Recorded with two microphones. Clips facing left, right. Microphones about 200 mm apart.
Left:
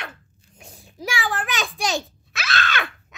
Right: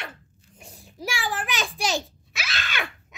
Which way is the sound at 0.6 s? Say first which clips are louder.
Left 2 dB; 10° right (ahead or behind).